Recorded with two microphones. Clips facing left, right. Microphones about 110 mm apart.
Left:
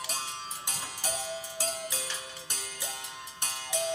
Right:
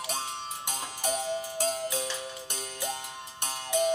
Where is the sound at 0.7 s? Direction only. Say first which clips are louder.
Right 6 dB; 25° right (ahead or behind).